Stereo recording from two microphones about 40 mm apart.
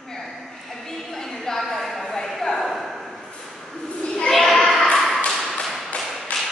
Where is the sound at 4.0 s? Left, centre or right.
Centre.